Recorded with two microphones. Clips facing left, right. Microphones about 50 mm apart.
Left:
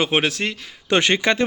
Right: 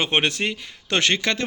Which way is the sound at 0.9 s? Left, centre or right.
Centre.